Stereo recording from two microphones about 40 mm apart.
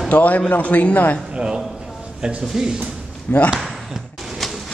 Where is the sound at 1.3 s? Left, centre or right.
Right.